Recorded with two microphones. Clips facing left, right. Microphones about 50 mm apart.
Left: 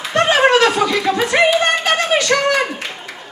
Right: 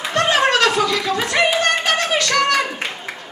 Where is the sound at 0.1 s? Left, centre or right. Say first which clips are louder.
Left 4 dB; left.